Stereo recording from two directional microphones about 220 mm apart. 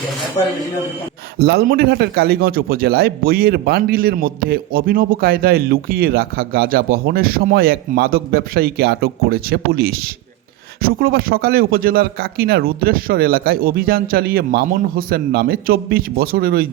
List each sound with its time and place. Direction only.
1.4 s a man's voice: 45° right (ahead or behind)